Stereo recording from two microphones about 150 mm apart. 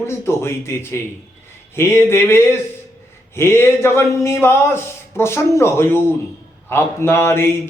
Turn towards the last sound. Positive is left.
turn(degrees=15)  # may be behind; listen again after turning